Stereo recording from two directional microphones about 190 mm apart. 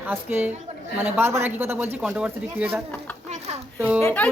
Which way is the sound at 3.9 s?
10° left (ahead or behind).